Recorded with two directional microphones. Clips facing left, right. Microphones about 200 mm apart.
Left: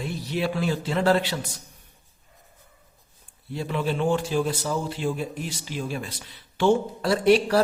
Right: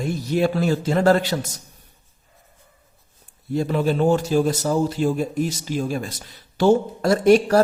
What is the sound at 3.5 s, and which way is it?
A man's voice, 45° right (ahead or behind).